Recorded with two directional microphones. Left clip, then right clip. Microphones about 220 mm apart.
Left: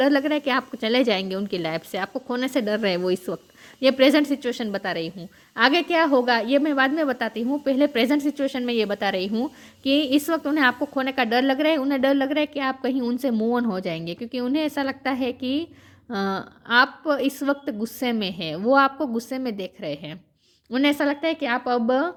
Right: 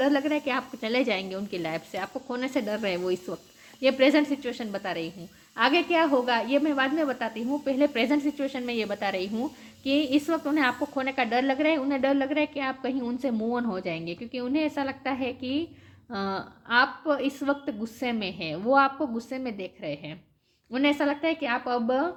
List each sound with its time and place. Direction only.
0.0 s a woman's voice: 45° left (ahead or behind)